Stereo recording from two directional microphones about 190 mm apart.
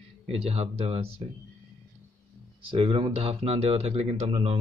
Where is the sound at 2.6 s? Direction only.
30° right (ahead or behind).